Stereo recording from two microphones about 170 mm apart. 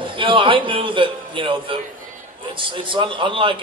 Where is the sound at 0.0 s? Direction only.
30° right (ahead or behind).